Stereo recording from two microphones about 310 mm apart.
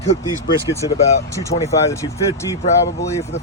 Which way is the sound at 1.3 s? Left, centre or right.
Centre.